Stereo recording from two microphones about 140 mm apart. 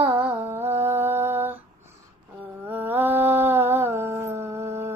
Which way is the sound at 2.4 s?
15° right (ahead or behind).